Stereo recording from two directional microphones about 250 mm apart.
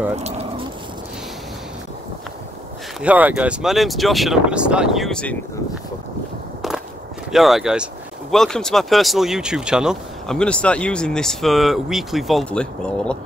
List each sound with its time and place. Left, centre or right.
0.1 s speech: right
3.0 s speech: centre
7.2 s speech: centre